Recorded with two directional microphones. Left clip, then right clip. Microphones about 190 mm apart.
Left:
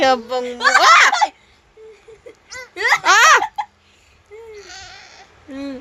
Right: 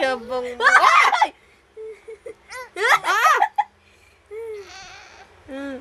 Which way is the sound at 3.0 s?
40° left (ahead or behind).